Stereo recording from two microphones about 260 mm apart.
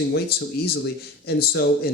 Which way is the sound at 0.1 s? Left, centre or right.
Left.